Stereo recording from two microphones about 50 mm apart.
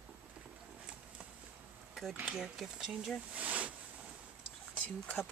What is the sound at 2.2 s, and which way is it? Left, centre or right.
Speech, centre.